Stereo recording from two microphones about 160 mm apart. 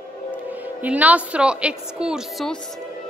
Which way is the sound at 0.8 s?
10° right (ahead or behind).